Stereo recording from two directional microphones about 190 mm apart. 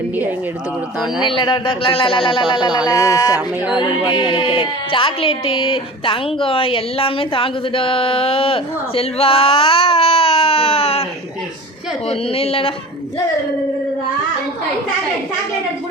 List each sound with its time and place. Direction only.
1.4 s a woman's voice: 25° left (ahead or behind)
12.0 s a woman's voice: 30° left (ahead or behind)